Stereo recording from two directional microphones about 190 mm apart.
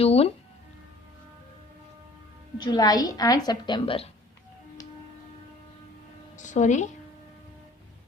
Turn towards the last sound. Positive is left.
turn(degrees=40)  # may be behind; listen again after turning